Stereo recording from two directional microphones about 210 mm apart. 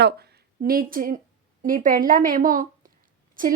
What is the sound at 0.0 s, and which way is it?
A woman's voice, 50° right (ahead or behind).